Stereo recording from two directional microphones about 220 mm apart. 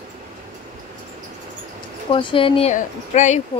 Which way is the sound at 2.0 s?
20° left (ahead or behind).